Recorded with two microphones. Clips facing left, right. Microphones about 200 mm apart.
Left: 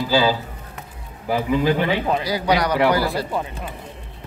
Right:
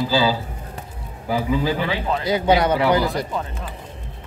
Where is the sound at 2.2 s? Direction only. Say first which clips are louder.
Right 7 dB; 25° right (ahead or behind).